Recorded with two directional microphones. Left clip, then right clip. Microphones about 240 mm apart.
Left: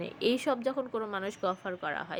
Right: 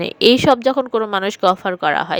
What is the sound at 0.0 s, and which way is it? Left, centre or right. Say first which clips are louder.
A woman's voice: right 17 dB; right.